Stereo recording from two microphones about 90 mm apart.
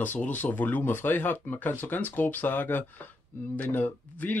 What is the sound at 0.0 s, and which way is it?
Speech, 20° left (ahead or behind).